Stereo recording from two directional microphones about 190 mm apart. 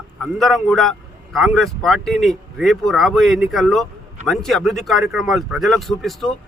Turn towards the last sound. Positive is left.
turn(degrees=0)  # may be behind; listen again after turning